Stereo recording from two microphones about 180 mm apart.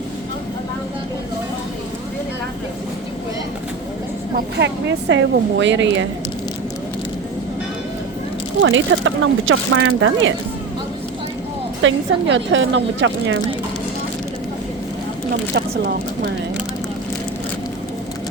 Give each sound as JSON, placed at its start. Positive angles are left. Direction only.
{"t": 4.6, "sound": "speech", "side_deg": -85}
{"t": 8.7, "sound": "speech", "side_deg": -90}
{"t": 11.8, "sound": "speech", "side_deg": -90}
{"t": 15.5, "sound": "speech", "side_deg": -70}